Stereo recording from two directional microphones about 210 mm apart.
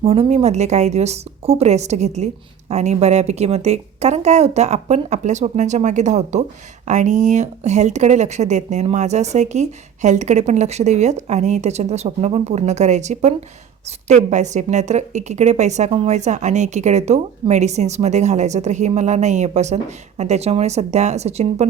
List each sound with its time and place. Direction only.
0.0 s a woman's voice: 30° right (ahead or behind)